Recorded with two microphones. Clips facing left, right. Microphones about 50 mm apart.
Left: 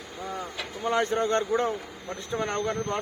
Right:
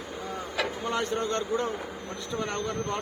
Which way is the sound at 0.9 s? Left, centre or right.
Left.